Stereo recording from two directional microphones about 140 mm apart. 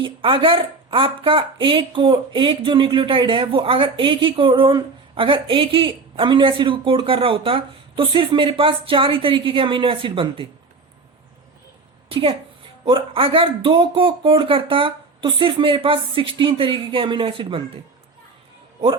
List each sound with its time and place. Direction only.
0.0 s a woman's voice: 40° right (ahead or behind)
12.8 s a woman's voice: 40° right (ahead or behind)